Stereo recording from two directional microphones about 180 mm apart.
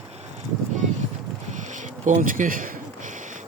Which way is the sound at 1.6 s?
45° right (ahead or behind).